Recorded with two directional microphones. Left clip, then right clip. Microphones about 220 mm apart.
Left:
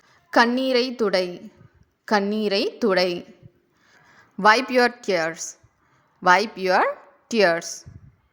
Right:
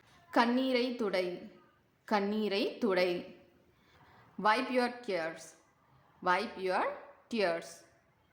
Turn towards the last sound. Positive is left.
turn(degrees=40)  # may be behind; listen again after turning